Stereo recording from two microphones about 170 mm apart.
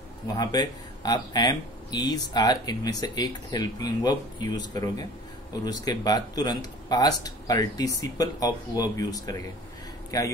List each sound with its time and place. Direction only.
0.4 s speech: 25° left (ahead or behind)